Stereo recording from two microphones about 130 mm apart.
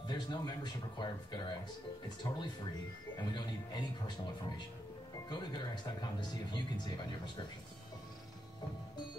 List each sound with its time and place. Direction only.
0.0 s speech: 35° left (ahead or behind)
5.3 s speech: 35° left (ahead or behind)